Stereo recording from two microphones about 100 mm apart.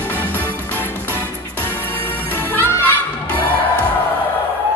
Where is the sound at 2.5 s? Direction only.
20° left (ahead or behind).